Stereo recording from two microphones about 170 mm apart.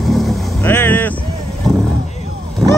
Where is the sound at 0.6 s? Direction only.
15° left (ahead or behind).